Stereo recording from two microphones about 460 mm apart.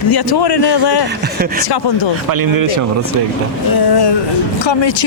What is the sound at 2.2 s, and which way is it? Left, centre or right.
Speech, right.